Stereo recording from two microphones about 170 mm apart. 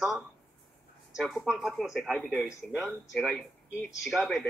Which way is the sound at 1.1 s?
Centre (ahead or behind).